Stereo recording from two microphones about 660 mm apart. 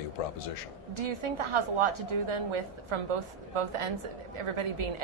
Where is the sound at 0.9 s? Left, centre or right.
Right.